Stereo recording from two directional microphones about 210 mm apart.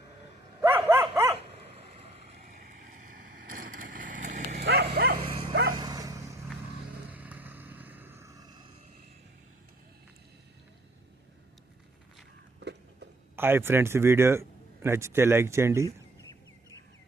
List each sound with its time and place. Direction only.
0.6 s dog: 10° right (ahead or behind)
3.5 s vehicle: 40° right (ahead or behind)
4.6 s dog: 50° right (ahead or behind)
4.9 s bow-wow: 50° right (ahead or behind)
5.2 s dog: 25° right (ahead or behind)
7.1 s vehicle: 5° right (ahead or behind)
12.5 s a sound: 55° right (ahead or behind)
13.3 s speech: 10° right (ahead or behind)